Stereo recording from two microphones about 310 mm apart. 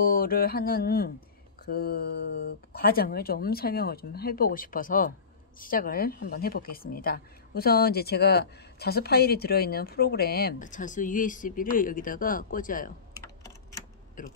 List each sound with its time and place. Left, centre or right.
0.0 s a woman's voice: left
13.2 s typing: centre
14.2 s a woman's voice: left